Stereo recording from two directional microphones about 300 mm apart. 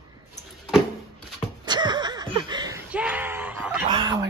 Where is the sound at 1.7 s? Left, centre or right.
Centre.